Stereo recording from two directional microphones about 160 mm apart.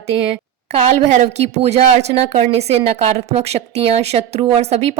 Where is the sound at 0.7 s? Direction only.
40° right (ahead or behind).